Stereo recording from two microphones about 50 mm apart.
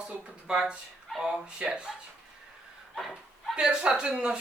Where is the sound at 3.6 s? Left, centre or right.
Centre.